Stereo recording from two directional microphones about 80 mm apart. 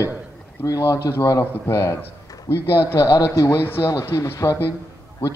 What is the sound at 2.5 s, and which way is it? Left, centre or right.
Speech, left.